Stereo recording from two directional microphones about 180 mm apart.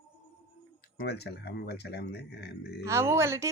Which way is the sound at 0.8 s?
60° left (ahead or behind).